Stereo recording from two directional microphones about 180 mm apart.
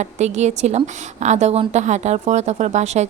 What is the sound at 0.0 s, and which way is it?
A woman's voice, 40° right (ahead or behind).